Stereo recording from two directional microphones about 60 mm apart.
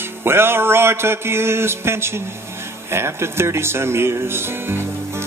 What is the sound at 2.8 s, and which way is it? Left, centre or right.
Speech, right.